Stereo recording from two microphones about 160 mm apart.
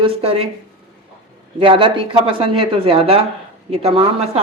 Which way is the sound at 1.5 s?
30° right (ahead or behind).